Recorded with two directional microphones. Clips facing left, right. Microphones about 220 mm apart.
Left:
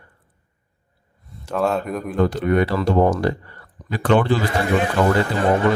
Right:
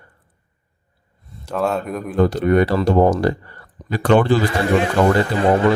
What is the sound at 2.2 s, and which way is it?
Speech, 40° right (ahead or behind).